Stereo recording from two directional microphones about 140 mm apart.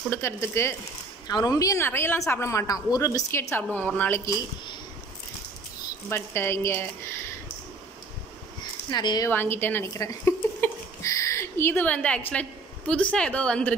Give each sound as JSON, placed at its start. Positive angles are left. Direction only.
{"t": 0.1, "sound": "speech", "side_deg": 20}
{"t": 6.0, "sound": "speech", "side_deg": 15}
{"t": 8.9, "sound": "a woman's voice", "side_deg": 30}
{"t": 9.3, "sound": "speech", "side_deg": 15}